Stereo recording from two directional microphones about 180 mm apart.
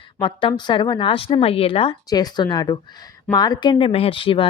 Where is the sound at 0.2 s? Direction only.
25° left (ahead or behind).